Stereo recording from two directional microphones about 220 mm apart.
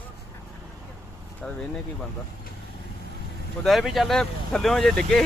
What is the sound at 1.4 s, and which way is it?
Speech, 5° left (ahead or behind).